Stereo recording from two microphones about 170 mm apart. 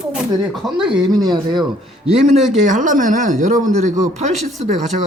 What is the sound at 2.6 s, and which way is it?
Speech, 50° right (ahead or behind).